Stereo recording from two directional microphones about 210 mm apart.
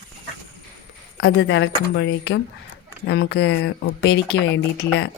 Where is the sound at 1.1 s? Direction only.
55° left (ahead or behind).